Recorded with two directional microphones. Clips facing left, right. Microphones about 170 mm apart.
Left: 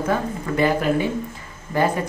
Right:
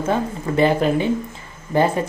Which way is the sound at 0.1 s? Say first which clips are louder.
Right 4 dB; 25° right (ahead or behind).